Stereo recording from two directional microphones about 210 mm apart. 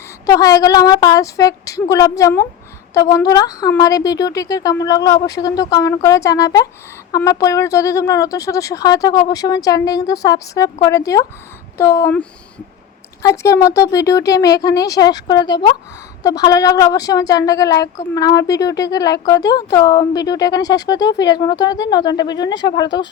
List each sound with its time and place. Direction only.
0.3 s speech: 15° left (ahead or behind)
13.2 s speech: 15° left (ahead or behind)